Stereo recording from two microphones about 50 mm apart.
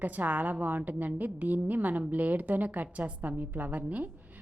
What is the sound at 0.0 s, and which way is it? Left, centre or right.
A woman's voice, right.